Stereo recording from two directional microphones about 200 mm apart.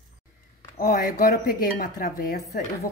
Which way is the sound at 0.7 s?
45° left (ahead or behind).